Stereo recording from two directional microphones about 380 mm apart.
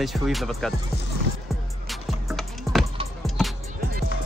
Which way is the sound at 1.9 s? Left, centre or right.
Centre.